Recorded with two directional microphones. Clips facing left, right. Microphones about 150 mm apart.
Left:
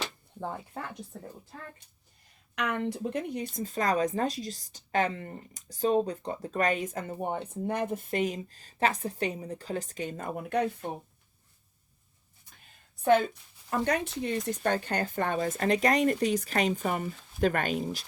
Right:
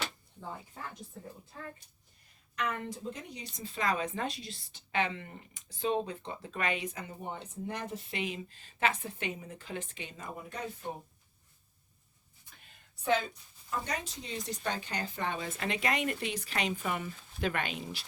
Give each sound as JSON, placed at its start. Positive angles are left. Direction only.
{"t": 0.3, "sound": "speech", "side_deg": 65}
{"t": 2.6, "sound": "speech", "side_deg": 70}
{"t": 13.7, "sound": "speech", "side_deg": 60}